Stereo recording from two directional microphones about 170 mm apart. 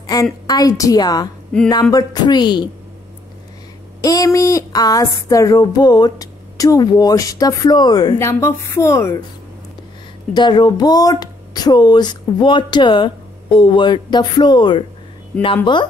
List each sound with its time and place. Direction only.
0.0 s speech: 20° left (ahead or behind)
4.0 s speech: 20° left (ahead or behind)
10.3 s speech: 25° left (ahead or behind)